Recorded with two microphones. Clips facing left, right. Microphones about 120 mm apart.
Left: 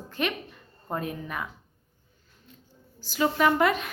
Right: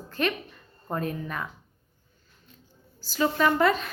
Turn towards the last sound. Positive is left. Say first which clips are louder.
# even
turn(degrees=15)  # may be behind; listen again after turning